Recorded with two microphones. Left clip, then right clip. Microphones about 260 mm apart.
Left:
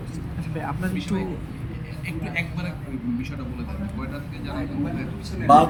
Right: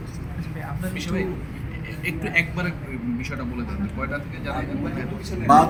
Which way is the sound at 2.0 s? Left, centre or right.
Right.